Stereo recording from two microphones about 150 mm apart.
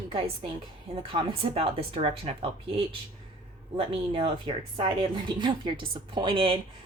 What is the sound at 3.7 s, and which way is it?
Speech, 35° right (ahead or behind).